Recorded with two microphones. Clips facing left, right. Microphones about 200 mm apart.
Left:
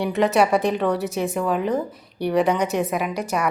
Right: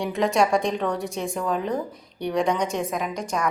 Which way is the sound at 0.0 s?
5° left (ahead or behind).